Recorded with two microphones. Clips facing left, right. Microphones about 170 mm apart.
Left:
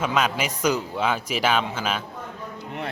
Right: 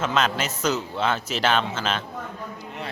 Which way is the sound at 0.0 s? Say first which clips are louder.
Even; 10° left (ahead or behind).